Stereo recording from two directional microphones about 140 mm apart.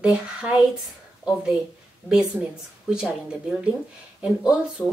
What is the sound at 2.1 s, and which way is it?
A woman's voice, 5° right (ahead or behind).